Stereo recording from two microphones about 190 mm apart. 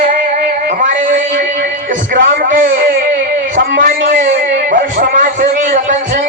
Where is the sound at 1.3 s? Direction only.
45° right (ahead or behind).